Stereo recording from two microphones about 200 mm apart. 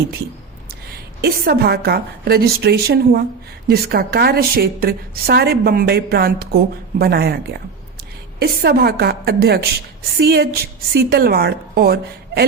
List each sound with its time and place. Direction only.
1.2 s a woman's voice: 50° right (ahead or behind)
8.4 s a woman's voice: 50° right (ahead or behind)